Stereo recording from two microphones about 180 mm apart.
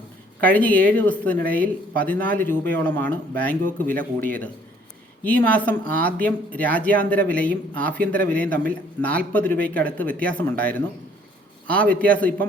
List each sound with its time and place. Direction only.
0.4 s speech: 10° left (ahead or behind)